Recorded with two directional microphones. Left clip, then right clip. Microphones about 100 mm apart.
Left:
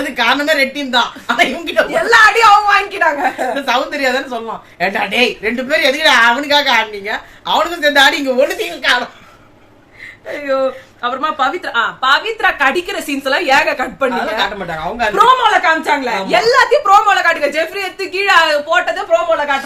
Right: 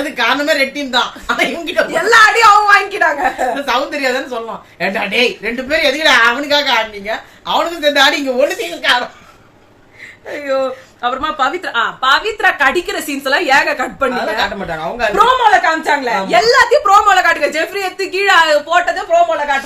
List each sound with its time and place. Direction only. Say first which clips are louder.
0.0 s a woman's voice: left 1 dB; 45° left (ahead or behind)
1.9 s speech: even; 25° right (ahead or behind)
3.5 s a woman's voice: even; 40° left (ahead or behind)
10.4 s a woman's voice: left 1 dB; 20° right (ahead or behind)
14.3 s speech: even; 40° left (ahead or behind)
15.1 s a woman's voice: even; centre (ahead or behind)
16.3 s speech: right 1 dB; 20° right (ahead or behind)
18.9 s a woman's voice: right 1 dB; 5° right (ahead or behind)